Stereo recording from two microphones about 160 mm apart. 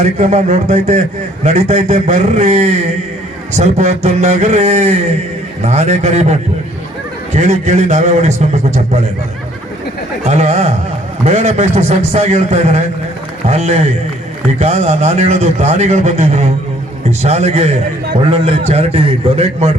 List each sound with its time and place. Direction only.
0.0 s a man's voice: 45° right (ahead or behind)
10.2 s a man's voice: 45° right (ahead or behind)